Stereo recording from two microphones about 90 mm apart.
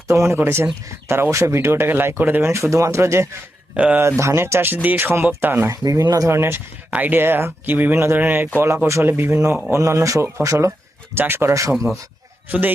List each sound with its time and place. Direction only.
0.1 s speech: 30° right (ahead or behind)
3.8 s speech: 15° right (ahead or behind)
4.2 s speech: 30° right (ahead or behind)
5.7 s speech: 40° right (ahead or behind)
10.7 s speech: 25° right (ahead or behind)
12.5 s speech: 20° right (ahead or behind)